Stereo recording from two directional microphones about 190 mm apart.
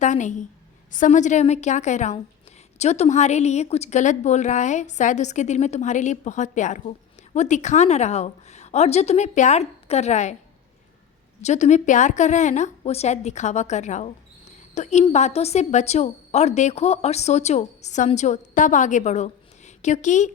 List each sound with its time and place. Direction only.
0.0 s a woman's voice: 40° left (ahead or behind)
11.4 s a woman's voice: 40° left (ahead or behind)